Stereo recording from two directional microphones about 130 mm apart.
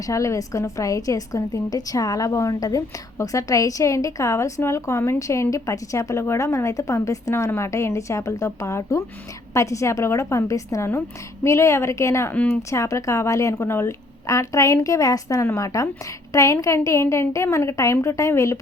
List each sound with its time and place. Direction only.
0.0 s a woman's voice: 25° left (ahead or behind)